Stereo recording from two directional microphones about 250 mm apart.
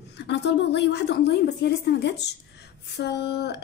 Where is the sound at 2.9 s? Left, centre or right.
Left.